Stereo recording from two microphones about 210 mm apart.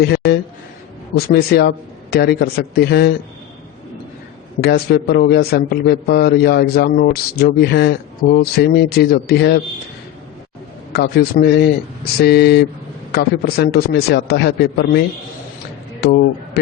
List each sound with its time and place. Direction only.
0.0 s a man's voice: 50° left (ahead or behind)
4.6 s a man's voice: 50° left (ahead or behind)
10.9 s a man's voice: 50° left (ahead or behind)
16.0 s a man's voice: 50° left (ahead or behind)